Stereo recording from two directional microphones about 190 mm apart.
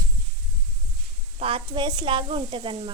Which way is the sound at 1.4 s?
30° right (ahead or behind).